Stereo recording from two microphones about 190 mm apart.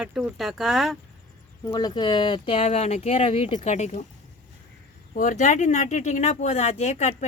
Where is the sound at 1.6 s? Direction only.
20° left (ahead or behind); by 4.0 s 35° left (ahead or behind).